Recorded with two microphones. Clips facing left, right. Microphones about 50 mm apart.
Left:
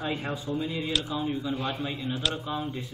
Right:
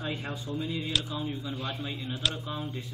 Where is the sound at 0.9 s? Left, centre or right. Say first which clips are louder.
Left 2 dB; centre.